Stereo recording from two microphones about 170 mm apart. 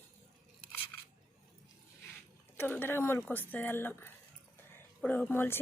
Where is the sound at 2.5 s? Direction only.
10° left (ahead or behind).